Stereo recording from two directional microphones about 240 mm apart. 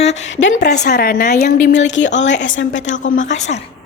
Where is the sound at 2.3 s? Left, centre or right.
Left.